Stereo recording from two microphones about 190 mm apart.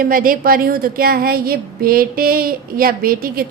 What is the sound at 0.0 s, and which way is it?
A woman's voice, 50° right (ahead or behind).